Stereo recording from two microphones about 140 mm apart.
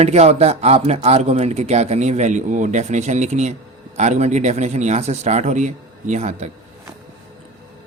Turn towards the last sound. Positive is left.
turn(degrees=-55)  # may be behind; listen again after turning